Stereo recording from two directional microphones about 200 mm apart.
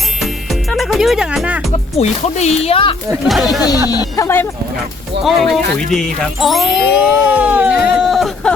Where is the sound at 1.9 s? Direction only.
35° left (ahead or behind).